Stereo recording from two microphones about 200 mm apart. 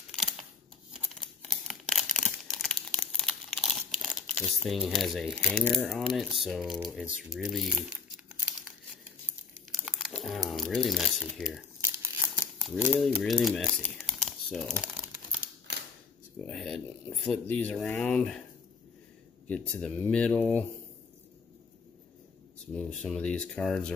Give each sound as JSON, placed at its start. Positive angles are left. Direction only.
{"t": 0.1, "sound": "a sound", "side_deg": 5}
{"t": 0.9, "sound": "tearing", "side_deg": 5}
{"t": 6.4, "sound": "speech", "side_deg": 0}
{"t": 9.7, "sound": "crumpling", "side_deg": -5}
{"t": 10.2, "sound": "speech", "side_deg": 0}
{"t": 11.8, "sound": "crumpling", "side_deg": -10}
{"t": 12.6, "sound": "speech", "side_deg": 0}
{"t": 13.9, "sound": "crumpling", "side_deg": 0}
{"t": 16.4, "sound": "speech", "side_deg": 5}
{"t": 19.4, "sound": "speech", "side_deg": 5}
{"t": 22.8, "sound": "speech", "side_deg": 5}